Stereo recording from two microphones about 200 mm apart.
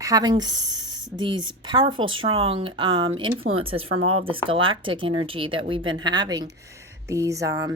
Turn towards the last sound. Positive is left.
turn(degrees=-15)  # may be behind; listen again after turning